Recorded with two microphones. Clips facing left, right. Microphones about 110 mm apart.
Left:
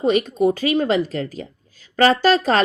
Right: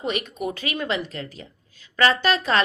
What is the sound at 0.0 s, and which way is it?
A woman's voice, 35° left (ahead or behind).